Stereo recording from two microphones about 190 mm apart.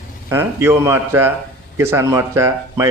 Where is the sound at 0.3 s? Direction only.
15° right (ahead or behind).